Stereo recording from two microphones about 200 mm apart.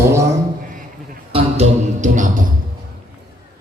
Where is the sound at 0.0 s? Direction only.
15° right (ahead or behind).